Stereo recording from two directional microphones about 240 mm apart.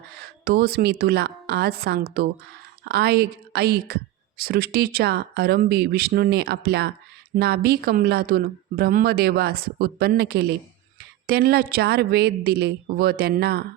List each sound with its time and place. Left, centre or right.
0.2 s a woman's voice: right